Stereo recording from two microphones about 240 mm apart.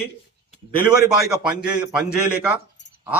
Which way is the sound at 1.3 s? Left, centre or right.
Centre.